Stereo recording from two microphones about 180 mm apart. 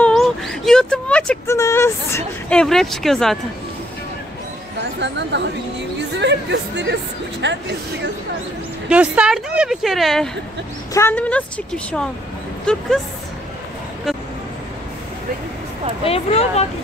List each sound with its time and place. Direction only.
0.0 s a sound: centre (ahead or behind)
1.6 s vehicle: 15° left (ahead or behind)
2.6 s speech: centre (ahead or behind)
5.0 s speech: 80° right
8.8 s speech: 5° right (ahead or behind)
10.9 s a woman's voice: 15° left (ahead or behind)
16.0 s speech: 35° left (ahead or behind)